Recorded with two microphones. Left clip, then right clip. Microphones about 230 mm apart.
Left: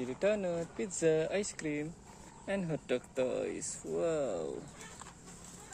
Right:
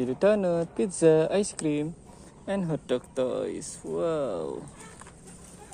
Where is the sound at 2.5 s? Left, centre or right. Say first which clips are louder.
Right 6 dB; centre.